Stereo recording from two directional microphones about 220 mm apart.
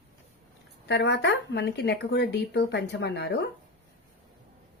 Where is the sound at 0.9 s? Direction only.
50° left (ahead or behind).